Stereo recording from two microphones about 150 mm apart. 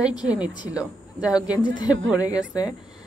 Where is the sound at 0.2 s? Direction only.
10° right (ahead or behind).